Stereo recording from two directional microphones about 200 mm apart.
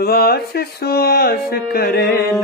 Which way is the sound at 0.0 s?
50° left (ahead or behind).